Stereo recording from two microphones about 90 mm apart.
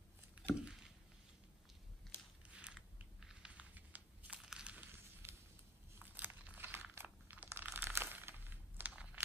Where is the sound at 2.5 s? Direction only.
10° right (ahead or behind).